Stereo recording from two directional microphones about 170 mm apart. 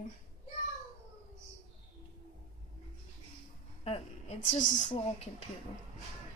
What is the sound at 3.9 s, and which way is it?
A woman's voice, 35° left (ahead or behind).